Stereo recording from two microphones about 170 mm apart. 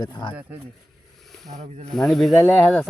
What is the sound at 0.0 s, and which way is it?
Speech, 25° left (ahead or behind).